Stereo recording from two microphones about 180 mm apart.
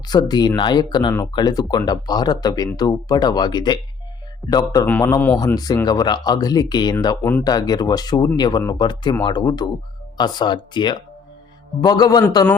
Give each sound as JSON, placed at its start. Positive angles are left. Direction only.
{"t": 0.1, "sound": "a man's voice", "side_deg": 25}
{"t": 7.2, "sound": "a man's voice", "side_deg": 10}
{"t": 7.4, "sound": "speech", "side_deg": 20}